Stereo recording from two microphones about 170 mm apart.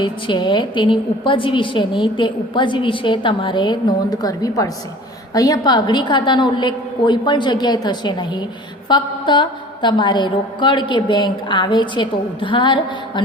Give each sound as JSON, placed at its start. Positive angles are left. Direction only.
{"t": 0.0, "sound": "a woman's voice", "side_deg": 25}